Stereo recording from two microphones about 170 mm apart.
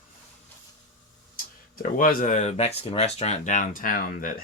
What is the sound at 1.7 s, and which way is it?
Speech, 55° left (ahead or behind).